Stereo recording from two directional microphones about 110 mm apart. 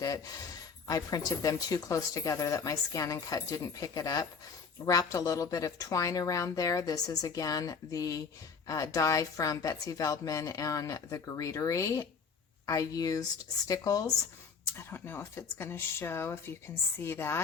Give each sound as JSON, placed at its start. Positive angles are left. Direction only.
{"t": 0.9, "sound": "a woman's voice", "side_deg": 35}
{"t": 14.8, "sound": "speech", "side_deg": 20}